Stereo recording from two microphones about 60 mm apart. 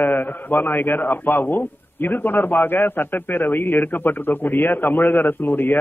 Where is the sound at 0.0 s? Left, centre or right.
Left.